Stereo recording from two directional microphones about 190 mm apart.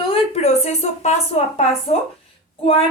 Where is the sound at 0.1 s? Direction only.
35° left (ahead or behind).